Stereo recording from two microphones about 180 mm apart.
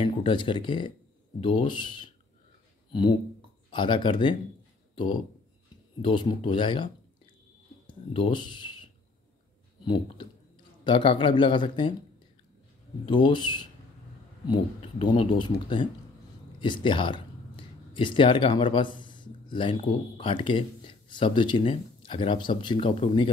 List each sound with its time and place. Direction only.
0.0 s speech: 25° left (ahead or behind)
2.9 s speech: 25° left (ahead or behind)
6.0 s speech: 30° left (ahead or behind)
9.8 s speech: 25° left (ahead or behind)
13.0 s speech: 25° left (ahead or behind)